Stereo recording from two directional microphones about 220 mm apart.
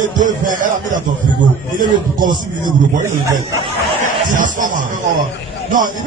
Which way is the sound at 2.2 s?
20° right (ahead or behind).